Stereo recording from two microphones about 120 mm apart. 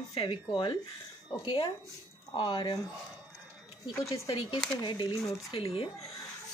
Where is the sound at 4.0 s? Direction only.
30° left (ahead or behind).